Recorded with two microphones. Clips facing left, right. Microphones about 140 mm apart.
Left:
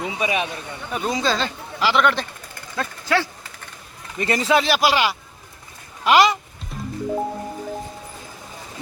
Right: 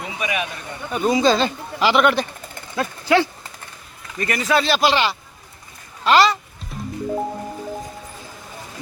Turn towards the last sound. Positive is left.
turn(degrees=0)  # may be behind; listen again after turning